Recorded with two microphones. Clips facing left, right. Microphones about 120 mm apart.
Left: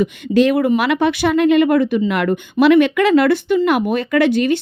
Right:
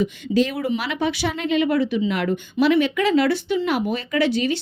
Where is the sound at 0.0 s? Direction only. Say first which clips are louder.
Left 6 dB; 60° left (ahead or behind).